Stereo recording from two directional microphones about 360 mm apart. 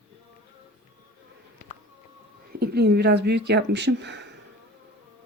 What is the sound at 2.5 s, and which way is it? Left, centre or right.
Speech, right.